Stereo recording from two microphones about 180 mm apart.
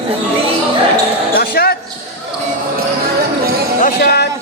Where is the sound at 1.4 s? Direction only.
60° left (ahead or behind).